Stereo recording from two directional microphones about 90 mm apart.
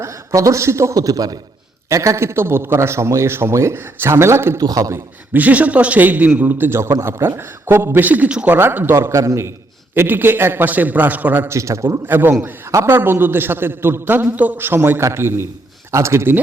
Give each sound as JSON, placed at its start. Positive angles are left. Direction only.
{"t": 0.0, "sound": "a man's voice", "side_deg": -35}
{"t": 4.6, "sound": "speech", "side_deg": -40}
{"t": 5.3, "sound": "a man's voice", "side_deg": -15}
{"t": 8.0, "sound": "a man's voice", "side_deg": -15}
{"t": 8.5, "sound": "a man's voice", "side_deg": -25}
{"t": 9.9, "sound": "a man's voice", "side_deg": -25}
{"t": 11.4, "sound": "a man's voice", "side_deg": -35}